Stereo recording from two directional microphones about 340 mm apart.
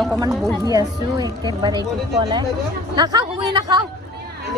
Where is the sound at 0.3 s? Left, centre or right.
Centre.